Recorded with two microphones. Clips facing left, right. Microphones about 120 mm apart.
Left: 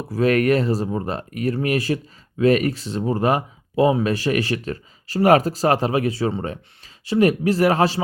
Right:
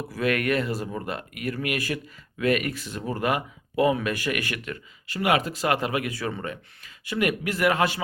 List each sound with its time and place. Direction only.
0.1 s speech: 35° left (ahead or behind)